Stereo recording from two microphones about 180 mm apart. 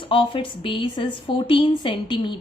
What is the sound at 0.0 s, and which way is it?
A woman's voice, 30° left (ahead or behind).